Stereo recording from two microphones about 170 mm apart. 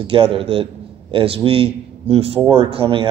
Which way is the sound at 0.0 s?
30° right (ahead or behind).